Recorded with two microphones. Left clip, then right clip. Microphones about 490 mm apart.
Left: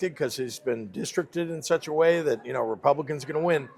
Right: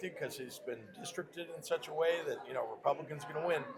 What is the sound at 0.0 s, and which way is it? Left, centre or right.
Speech, left.